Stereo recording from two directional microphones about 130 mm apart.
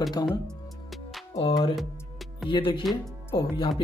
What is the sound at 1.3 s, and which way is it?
Speech, 45° left (ahead or behind).